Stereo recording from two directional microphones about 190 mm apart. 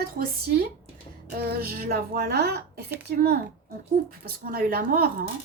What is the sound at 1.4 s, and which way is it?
Speech, 55° right (ahead or behind).